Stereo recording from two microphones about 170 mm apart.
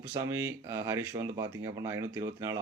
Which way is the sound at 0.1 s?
15° right (ahead or behind).